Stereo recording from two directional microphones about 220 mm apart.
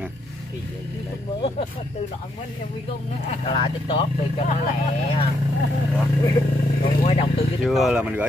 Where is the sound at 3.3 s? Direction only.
25° left (ahead or behind).